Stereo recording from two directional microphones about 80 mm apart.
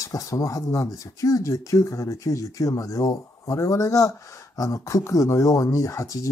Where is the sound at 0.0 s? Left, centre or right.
Left.